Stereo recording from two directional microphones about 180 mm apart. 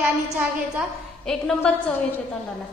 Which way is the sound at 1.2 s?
5° left (ahead or behind).